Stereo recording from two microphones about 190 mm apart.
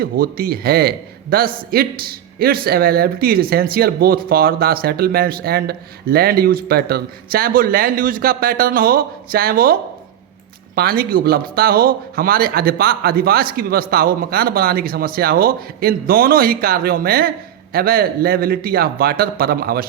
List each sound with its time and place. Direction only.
0.0 s a man's voice: 50° right (ahead or behind)
10.8 s a man's voice: 50° right (ahead or behind)